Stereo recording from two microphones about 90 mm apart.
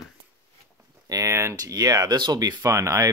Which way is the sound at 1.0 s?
35° right (ahead or behind).